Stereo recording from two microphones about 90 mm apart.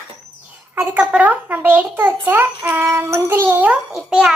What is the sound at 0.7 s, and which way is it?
A child's voice, 15° right (ahead or behind).